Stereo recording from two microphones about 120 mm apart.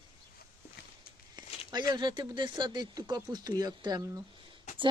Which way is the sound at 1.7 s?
35° right (ahead or behind).